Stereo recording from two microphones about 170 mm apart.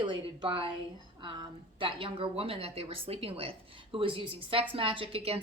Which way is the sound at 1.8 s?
30° right (ahead or behind).